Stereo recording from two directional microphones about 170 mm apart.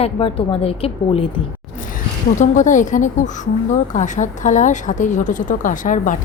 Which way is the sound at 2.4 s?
45° left (ahead or behind).